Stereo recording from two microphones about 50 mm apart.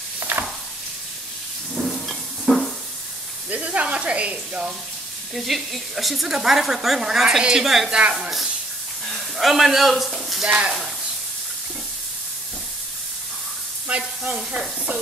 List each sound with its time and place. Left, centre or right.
0.2 s stir: right
1.9 s dishes: centre
3.4 s speech: right
5.3 s speech: centre
8.1 s stir: centre
9.0 s speech: centre
10.4 s speech: right
13.8 s speech: right